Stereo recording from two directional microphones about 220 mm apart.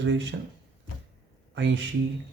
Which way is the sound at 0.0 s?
55° right (ahead or behind).